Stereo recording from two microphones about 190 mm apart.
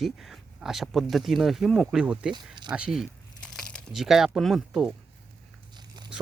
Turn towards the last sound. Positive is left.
turn(degrees=0)  # may be behind; listen again after turning